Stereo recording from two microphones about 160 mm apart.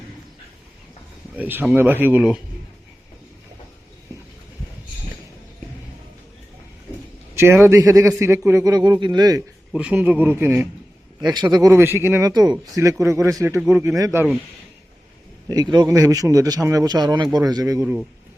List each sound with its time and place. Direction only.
1.4 s speech: 10° right (ahead or behind)
7.3 s a man's voice: 15° right (ahead or behind)
9.7 s speech: 10° right (ahead or behind)
11.2 s a man's voice: 25° right (ahead or behind)
15.4 s a man's voice: 25° right (ahead or behind)